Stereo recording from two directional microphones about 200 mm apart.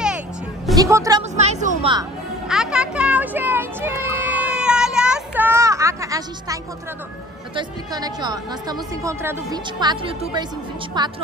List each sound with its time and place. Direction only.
0.7 s speech: 15° right (ahead or behind)
1.3 s a woman's voice: 35° right (ahead or behind)
2.4 s music: 5° right (ahead or behind)
7.5 s speech: 20° right (ahead or behind)